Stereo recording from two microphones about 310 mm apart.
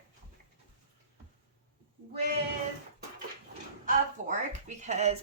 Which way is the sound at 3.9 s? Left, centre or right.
Right.